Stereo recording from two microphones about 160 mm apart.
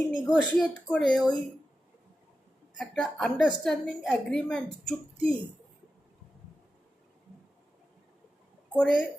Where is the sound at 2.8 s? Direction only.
Centre (ahead or behind).